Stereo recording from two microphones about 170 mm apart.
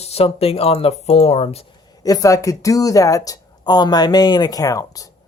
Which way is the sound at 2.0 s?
20° left (ahead or behind).